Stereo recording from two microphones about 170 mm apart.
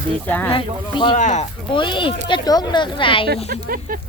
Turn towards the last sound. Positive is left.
turn(degrees=-60)  # may be behind; listen again after turning